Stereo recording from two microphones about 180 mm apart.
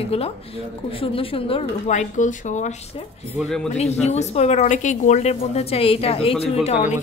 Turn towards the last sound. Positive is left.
turn(degrees=40)  # may be behind; listen again after turning